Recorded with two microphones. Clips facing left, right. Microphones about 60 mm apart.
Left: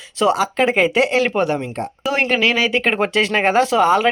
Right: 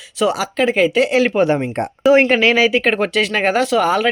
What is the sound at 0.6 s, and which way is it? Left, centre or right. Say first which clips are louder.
Speech: right 4 dB; centre.